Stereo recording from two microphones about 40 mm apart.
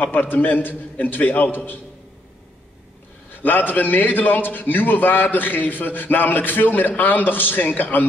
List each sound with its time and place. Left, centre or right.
0.0 s a man's voice: left
3.3 s a man's voice: left